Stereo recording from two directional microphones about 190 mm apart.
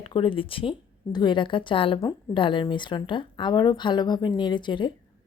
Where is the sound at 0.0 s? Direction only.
25° left (ahead or behind).